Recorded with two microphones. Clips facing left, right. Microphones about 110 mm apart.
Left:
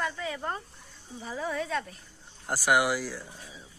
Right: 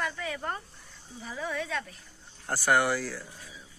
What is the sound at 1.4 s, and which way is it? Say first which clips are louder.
Speech: left 2 dB; 30° left (ahead or behind).